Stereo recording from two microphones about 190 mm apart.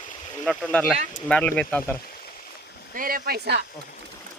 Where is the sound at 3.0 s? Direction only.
50° right (ahead or behind).